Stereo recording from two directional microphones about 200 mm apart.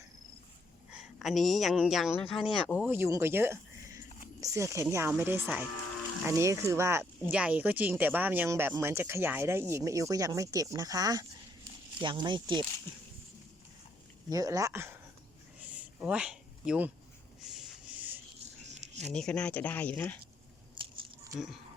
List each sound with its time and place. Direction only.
0.9 s speech: centre (ahead or behind)
2.8 s speech: 10° right (ahead or behind)
14.3 s speech: 15° right (ahead or behind)
15.6 s a sound: 5° right (ahead or behind)
17.4 s rub: centre (ahead or behind)
18.7 s a sound: 35° right (ahead or behind)
19.0 s speech: 5° left (ahead or behind)